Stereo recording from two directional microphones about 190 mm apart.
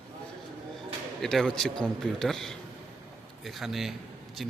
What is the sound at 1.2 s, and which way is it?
A man's voice, centre (ahead or behind).